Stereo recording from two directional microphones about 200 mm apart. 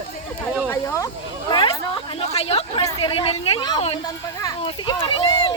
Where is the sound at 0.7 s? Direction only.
15° left (ahead or behind).